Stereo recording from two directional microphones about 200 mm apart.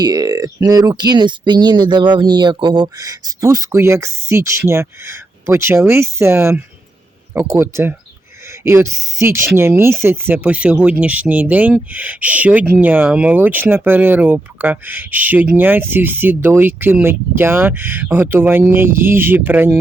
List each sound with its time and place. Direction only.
0.0 s speech: 20° right (ahead or behind)